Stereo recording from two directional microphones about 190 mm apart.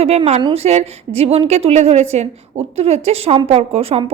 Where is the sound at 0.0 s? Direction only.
35° right (ahead or behind).